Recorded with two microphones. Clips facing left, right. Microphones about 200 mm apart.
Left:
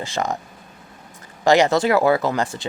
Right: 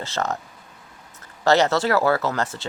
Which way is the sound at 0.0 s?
15° left (ahead or behind).